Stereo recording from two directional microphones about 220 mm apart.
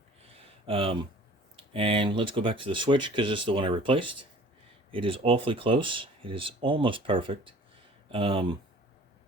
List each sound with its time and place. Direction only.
0.7 s speech: 25° right (ahead or behind)